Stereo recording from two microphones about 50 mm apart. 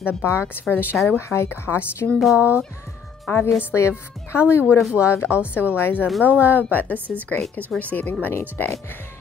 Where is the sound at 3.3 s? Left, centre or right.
Left.